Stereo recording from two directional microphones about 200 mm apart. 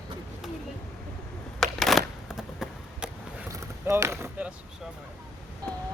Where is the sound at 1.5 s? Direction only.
Centre (ahead or behind).